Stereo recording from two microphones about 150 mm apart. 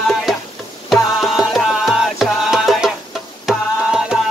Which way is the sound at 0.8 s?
Centre (ahead or behind).